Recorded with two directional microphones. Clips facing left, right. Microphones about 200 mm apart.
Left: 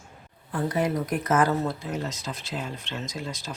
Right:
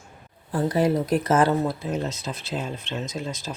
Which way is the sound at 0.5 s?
30° right (ahead or behind).